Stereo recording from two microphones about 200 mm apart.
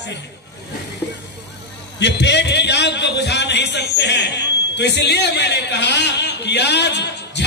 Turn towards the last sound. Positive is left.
turn(degrees=60)  # may be behind; listen again after turning